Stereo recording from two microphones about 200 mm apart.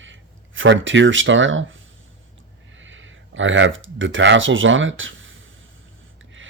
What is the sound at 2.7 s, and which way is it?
Speech, 70° right (ahead or behind).